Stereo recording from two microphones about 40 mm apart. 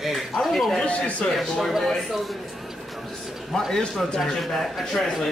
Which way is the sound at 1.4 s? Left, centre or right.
Centre.